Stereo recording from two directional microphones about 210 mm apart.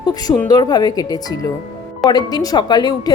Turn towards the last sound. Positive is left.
turn(degrees=20)  # may be behind; listen again after turning